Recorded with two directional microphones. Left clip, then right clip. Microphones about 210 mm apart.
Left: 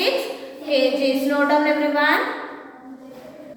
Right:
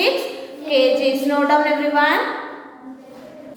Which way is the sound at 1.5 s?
30° right (ahead or behind).